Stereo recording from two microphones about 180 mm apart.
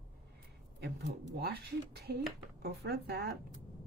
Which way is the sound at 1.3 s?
60° right (ahead or behind).